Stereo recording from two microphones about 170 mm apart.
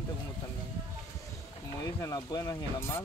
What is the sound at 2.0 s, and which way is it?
Speech, 20° left (ahead or behind).